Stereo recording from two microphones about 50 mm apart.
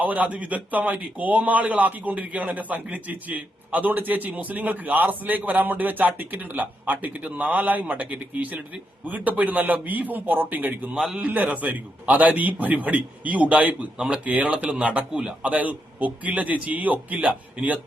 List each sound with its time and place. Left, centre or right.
0.0 s speech: right
10.9 s a man's voice: centre
11.2 s speech: right
15.2 s a man's voice: centre
15.4 s speech: right